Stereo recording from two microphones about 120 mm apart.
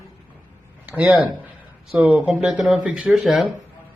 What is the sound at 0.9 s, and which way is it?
Speech, 10° right (ahead or behind).